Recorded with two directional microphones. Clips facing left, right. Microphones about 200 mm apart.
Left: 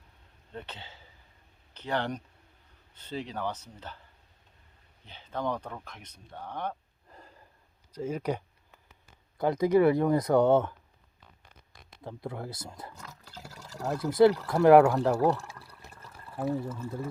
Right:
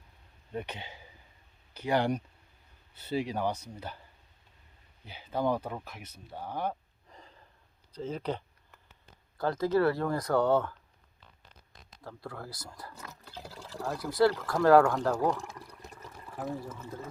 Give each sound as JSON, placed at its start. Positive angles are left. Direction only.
{"t": 0.5, "sound": "speech", "side_deg": -15}
{"t": 5.0, "sound": "speech", "side_deg": -10}
{"t": 7.1, "sound": "sniff", "side_deg": 5}
{"t": 7.9, "sound": "speech", "side_deg": 10}
{"t": 12.0, "sound": "speech", "side_deg": 20}
{"t": 15.4, "sound": "water", "side_deg": -15}
{"t": 16.4, "sound": "speech", "side_deg": 10}